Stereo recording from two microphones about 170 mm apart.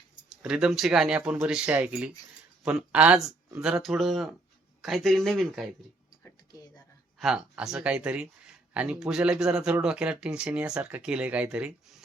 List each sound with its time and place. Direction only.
0.3 s speech: 5° right (ahead or behind)
7.2 s speech: 5° right (ahead or behind)